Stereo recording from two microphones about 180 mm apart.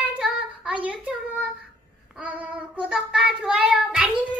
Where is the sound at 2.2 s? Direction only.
10° right (ahead or behind).